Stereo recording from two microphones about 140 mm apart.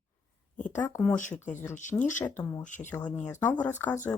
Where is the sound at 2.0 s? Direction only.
65° left (ahead or behind).